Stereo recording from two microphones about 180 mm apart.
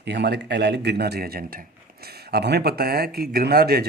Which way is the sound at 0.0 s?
70° right (ahead or behind).